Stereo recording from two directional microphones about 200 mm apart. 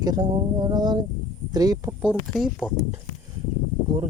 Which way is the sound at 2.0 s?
Centre (ahead or behind).